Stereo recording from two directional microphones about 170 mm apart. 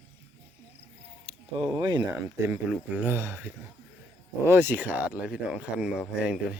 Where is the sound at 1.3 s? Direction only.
35° right (ahead or behind).